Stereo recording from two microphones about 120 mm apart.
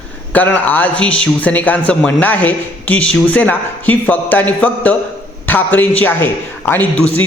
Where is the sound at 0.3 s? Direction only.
15° left (ahead or behind).